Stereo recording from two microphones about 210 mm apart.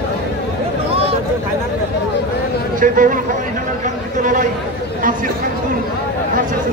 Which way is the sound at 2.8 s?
40° right (ahead or behind).